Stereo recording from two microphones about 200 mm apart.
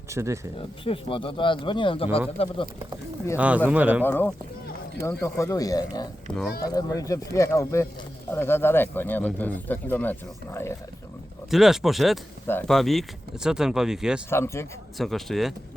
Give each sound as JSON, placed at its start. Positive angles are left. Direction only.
{"t": 0.1, "sound": "speech", "side_deg": -15}
{"t": 0.9, "sound": "speech", "side_deg": 25}
{"t": 3.3, "sound": "speech", "side_deg": -5}
{"t": 4.0, "sound": "speech", "side_deg": 10}
{"t": 6.3, "sound": "speech", "side_deg": 5}
{"t": 6.7, "sound": "speech", "side_deg": 15}
{"t": 11.5, "sound": "speech", "side_deg": 0}
{"t": 14.3, "sound": "speech", "side_deg": 15}
{"t": 14.9, "sound": "speech", "side_deg": 0}